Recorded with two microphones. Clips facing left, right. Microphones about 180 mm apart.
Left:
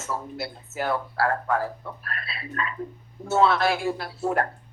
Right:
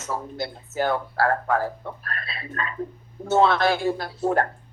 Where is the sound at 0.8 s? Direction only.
35° right (ahead or behind).